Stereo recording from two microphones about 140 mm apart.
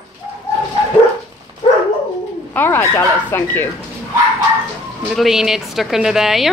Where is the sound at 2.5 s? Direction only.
15° left (ahead or behind).